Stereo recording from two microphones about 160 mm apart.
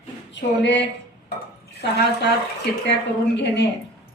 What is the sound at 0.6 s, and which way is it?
Speech, 90° left.